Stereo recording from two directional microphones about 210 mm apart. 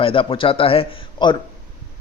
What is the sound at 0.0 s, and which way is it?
A man's voice, 25° left (ahead or behind).